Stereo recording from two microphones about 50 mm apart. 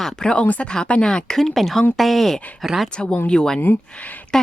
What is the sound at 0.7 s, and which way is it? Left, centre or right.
Speech, left.